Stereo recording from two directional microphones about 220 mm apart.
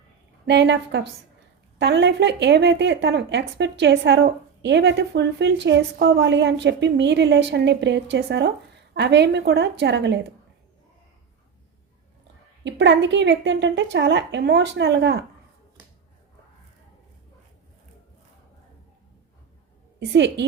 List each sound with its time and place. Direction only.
0.4 s speech: 50° right (ahead or behind)
12.6 s speech: 55° right (ahead or behind)
20.1 s speech: 55° right (ahead or behind)